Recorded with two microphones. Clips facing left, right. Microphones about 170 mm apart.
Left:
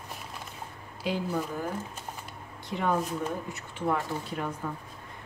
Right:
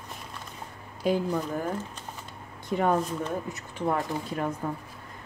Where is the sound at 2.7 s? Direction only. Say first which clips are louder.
Right 4 dB; 45° right (ahead or behind).